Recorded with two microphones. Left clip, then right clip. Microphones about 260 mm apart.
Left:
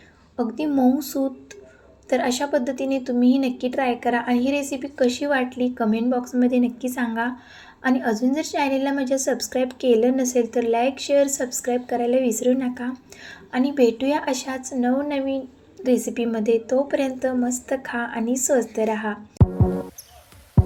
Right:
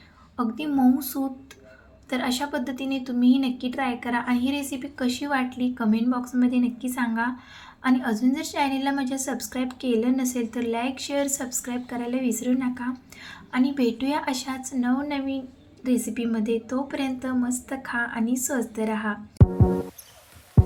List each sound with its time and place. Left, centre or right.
0.3 s a woman's voice: centre